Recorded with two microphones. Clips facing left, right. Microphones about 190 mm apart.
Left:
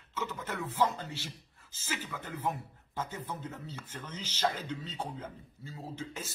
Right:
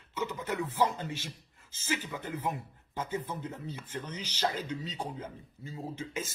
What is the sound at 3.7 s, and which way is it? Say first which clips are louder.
Speech: right 4 dB; 15° right (ahead or behind).